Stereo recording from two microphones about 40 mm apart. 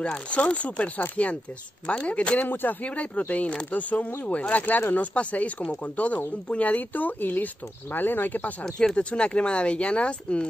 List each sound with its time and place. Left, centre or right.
0.0 s speech: left
2.5 s speech: left
2.8 s speech: left
8.6 s speech: centre
8.9 s speech: left